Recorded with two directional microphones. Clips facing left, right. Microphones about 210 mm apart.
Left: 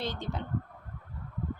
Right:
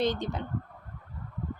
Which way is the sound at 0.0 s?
20° right (ahead or behind).